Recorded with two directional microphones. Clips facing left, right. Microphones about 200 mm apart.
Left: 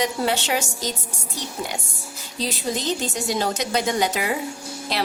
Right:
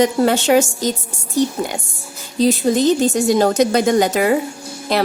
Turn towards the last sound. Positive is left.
turn(degrees=-50)  # may be behind; listen again after turning